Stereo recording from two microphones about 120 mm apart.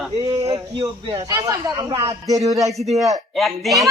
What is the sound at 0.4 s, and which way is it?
Speech, 45° right (ahead or behind).